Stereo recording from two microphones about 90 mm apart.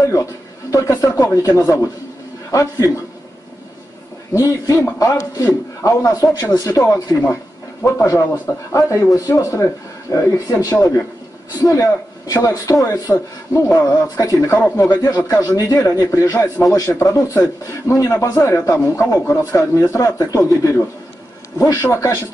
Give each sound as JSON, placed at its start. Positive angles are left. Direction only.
{"t": 0.0, "sound": "a man's voice", "side_deg": 35}
{"t": 4.3, "sound": "a man's voice", "side_deg": 35}